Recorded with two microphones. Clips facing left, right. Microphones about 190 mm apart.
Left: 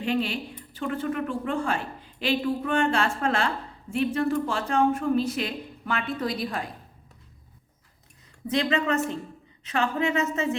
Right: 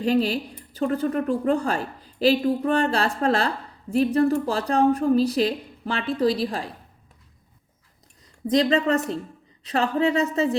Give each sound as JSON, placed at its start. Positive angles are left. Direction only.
{"t": 0.0, "sound": "speech", "side_deg": -40}
{"t": 8.4, "sound": "speech", "side_deg": -35}